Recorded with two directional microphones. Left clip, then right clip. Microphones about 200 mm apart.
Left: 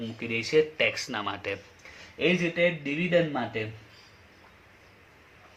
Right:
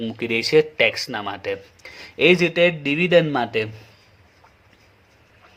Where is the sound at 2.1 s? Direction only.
55° right (ahead or behind).